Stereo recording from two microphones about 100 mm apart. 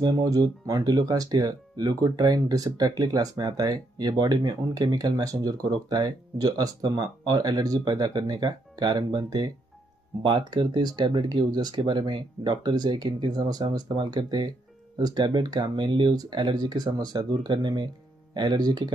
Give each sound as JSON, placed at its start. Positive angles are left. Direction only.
{"t": 0.0, "sound": "speech", "side_deg": -40}